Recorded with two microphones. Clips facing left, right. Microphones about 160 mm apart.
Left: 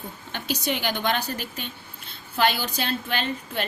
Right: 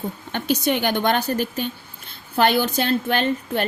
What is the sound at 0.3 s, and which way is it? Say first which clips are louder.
A woman's voice: right 6 dB; 55° right (ahead or behind).